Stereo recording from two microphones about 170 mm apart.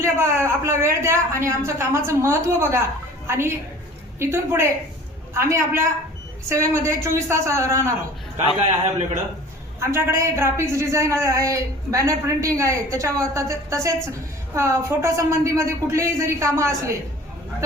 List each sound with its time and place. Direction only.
0.0 s a woman's voice: 15° right (ahead or behind)
9.8 s a woman's voice: 15° right (ahead or behind)